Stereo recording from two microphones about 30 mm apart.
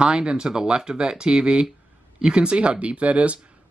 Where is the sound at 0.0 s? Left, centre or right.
Right.